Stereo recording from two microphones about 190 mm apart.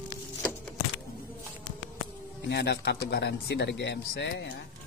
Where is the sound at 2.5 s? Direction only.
60° left (ahead or behind).